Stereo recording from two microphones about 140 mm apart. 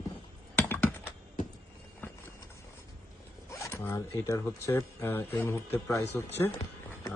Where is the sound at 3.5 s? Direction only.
20° left (ahead or behind).